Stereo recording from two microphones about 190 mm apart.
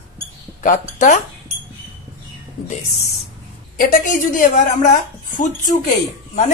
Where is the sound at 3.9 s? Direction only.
45° left (ahead or behind).